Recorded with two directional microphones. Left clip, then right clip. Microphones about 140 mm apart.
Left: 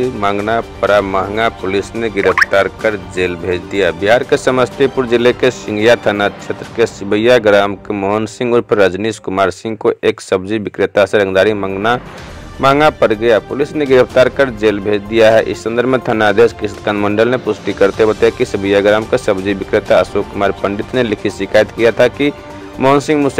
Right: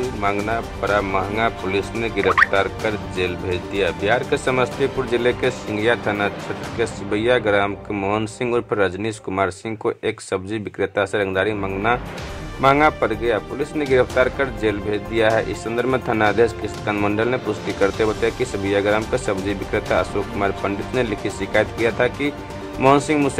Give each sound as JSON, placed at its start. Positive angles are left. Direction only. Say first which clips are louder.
{"t": 0.2, "sound": "speech", "louder": "left 5 dB", "side_deg": 35}